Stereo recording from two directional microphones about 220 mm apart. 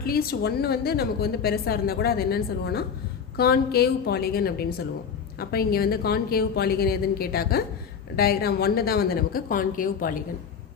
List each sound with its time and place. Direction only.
0.0 s a woman's voice: 45° left (ahead or behind)